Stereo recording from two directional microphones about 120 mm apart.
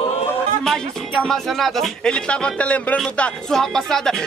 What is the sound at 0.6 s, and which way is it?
Speech, 5° left (ahead or behind).